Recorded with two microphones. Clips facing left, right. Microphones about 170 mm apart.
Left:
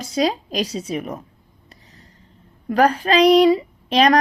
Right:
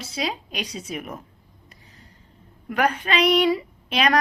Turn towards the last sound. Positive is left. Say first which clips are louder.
# left 6 dB
turn(degrees=30)  # may be behind; listen again after turning